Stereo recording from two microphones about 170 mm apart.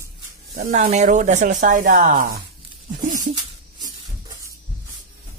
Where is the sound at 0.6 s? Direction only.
45° right (ahead or behind).